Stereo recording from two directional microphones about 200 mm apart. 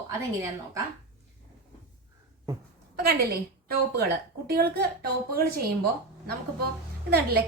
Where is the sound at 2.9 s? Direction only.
50° right (ahead or behind).